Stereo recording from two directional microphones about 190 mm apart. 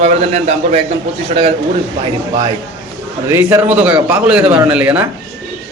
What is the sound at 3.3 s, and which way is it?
A man's voice, 15° right (ahead or behind).